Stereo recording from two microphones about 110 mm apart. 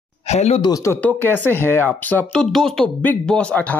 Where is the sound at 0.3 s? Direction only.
80° left.